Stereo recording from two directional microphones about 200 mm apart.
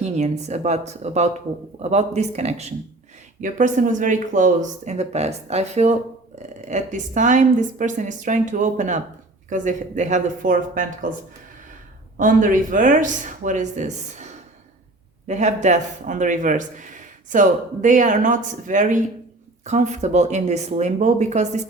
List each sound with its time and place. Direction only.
0.0 s a man's voice: 35° right (ahead or behind)
12.1 s a man's voice: 45° right (ahead or behind)